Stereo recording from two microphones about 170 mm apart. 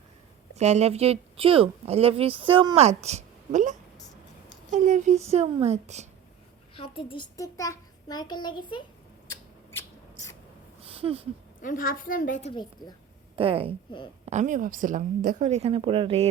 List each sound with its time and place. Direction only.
0.6 s speech: 40° right (ahead or behind)
6.7 s a woman's voice: 30° left (ahead or behind)
7.3 s a child's voice: 20° left (ahead or behind)
9.3 s a sound: 15° left (ahead or behind)
10.8 s a sound: 35° right (ahead or behind)
11.6 s a woman's voice: 55° left (ahead or behind)
13.3 s speech: 35° right (ahead or behind)
14.3 s a woman's voice: 45° right (ahead or behind)